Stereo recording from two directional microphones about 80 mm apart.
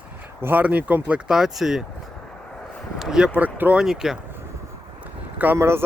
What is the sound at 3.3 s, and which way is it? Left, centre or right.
Speech, right.